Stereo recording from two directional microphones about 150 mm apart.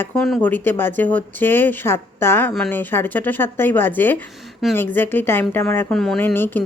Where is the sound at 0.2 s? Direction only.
Centre (ahead or behind).